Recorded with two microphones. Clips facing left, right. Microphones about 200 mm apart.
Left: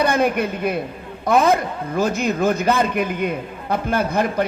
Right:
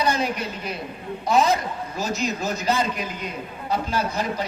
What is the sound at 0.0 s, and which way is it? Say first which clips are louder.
A man's voice: left 6 dB; 55° left (ahead or behind).